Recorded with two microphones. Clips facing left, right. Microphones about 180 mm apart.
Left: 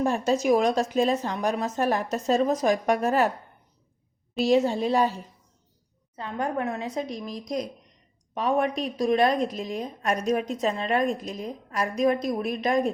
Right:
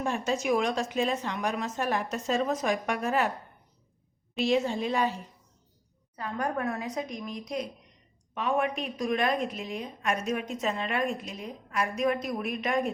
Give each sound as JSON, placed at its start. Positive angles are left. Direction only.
{"t": 0.0, "sound": "a woman's voice", "side_deg": 40}
{"t": 4.4, "sound": "a woman's voice", "side_deg": 40}
{"t": 6.1, "sound": "a woman's voice", "side_deg": 25}